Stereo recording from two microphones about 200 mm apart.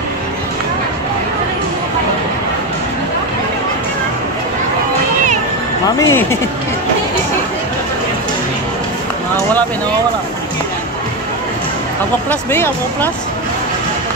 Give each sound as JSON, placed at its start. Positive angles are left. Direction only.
{"t": 5.9, "sound": "speech", "side_deg": 15}
{"t": 12.3, "sound": "speech", "side_deg": 10}